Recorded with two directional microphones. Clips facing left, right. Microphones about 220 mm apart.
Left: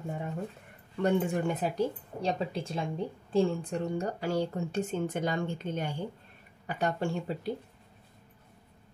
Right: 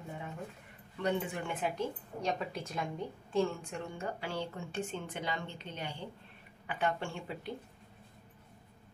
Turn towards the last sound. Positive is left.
turn(degrees=40)  # may be behind; listen again after turning